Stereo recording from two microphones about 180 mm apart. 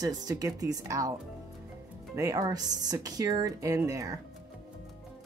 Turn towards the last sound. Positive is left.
turn(degrees=-20)  # may be behind; listen again after turning